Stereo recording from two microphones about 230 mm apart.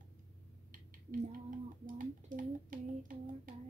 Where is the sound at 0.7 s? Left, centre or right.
Right.